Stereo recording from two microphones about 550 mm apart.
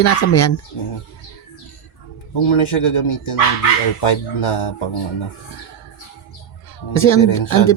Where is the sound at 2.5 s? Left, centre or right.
Left.